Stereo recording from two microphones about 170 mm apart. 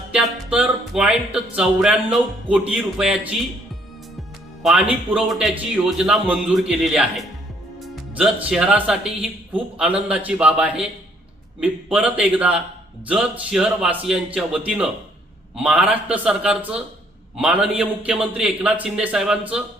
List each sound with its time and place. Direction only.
0.1 s speech: 5° right (ahead or behind)
4.6 s speech: 5° right (ahead or behind)